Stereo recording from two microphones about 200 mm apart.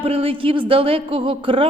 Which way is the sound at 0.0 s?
30° right (ahead or behind).